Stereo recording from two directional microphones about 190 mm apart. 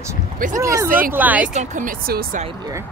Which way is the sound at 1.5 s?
45° right (ahead or behind).